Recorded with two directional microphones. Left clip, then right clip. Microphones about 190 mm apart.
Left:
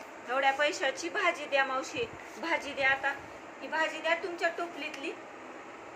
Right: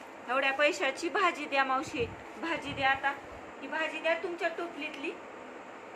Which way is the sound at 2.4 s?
15° right (ahead or behind).